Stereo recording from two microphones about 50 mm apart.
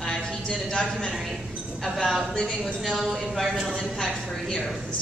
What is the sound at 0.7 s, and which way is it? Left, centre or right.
A woman's voice, centre.